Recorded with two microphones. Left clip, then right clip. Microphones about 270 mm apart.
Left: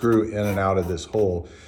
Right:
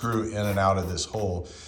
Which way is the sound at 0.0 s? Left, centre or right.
Centre.